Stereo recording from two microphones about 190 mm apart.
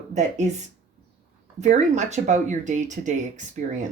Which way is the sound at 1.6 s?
40° right (ahead or behind).